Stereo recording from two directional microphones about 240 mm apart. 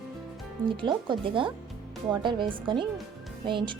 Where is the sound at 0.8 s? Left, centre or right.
Centre.